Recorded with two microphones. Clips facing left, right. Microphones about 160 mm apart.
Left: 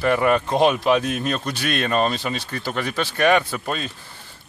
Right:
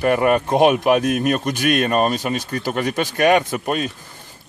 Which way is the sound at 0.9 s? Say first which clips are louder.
Right 4 dB; 50° right (ahead or behind).